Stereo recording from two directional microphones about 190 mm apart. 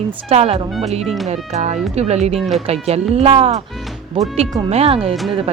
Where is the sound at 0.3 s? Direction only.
35° right (ahead or behind).